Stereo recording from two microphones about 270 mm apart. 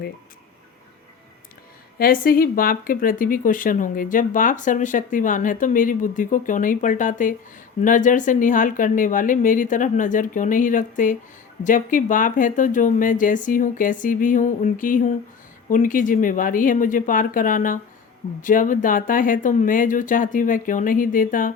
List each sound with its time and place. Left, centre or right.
2.0 s speech: left